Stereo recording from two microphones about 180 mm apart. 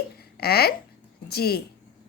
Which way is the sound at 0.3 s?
60° left (ahead or behind).